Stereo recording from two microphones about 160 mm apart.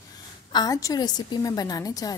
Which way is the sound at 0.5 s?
25° left (ahead or behind).